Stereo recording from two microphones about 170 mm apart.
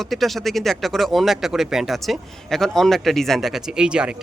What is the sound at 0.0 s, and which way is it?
Speech, centre (ahead or behind).